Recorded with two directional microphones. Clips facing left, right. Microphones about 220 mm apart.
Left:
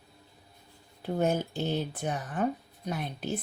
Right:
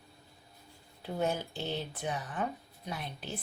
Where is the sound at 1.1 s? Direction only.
45° left (ahead or behind).